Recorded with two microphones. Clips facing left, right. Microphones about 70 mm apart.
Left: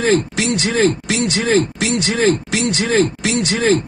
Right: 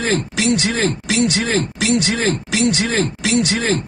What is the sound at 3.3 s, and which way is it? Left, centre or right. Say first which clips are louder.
Speech: left 2 dB; left.